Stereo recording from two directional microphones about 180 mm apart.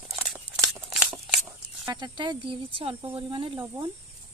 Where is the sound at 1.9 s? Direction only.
25° right (ahead or behind).